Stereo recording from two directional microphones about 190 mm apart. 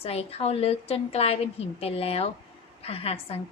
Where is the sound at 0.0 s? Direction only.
30° left (ahead or behind).